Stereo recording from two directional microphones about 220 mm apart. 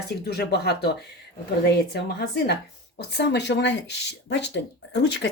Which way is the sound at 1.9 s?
45° left (ahead or behind).